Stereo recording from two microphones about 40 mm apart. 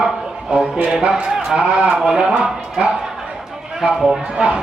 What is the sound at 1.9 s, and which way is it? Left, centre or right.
A man's voice, centre.